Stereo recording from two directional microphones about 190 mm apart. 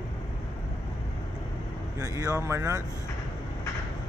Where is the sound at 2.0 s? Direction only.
15° right (ahead or behind).